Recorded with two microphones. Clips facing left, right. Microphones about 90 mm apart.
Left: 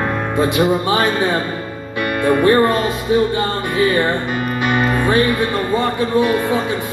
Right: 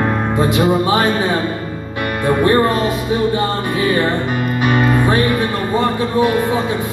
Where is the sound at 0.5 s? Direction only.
20° right (ahead or behind).